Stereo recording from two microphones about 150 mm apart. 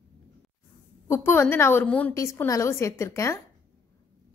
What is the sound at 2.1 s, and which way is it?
A woman's voice, 20° left (ahead or behind).